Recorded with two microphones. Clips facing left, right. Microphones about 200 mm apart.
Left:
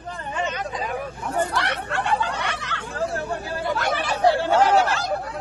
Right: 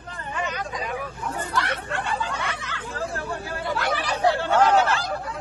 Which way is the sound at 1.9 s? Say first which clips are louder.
Left 4 dB; 70° left (ahead or behind).